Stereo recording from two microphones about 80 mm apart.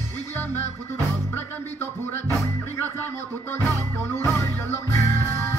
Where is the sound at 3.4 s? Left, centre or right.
Left.